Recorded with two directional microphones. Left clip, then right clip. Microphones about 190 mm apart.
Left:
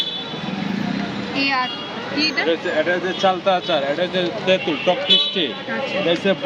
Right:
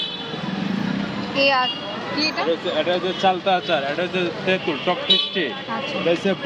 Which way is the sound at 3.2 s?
15° left (ahead or behind).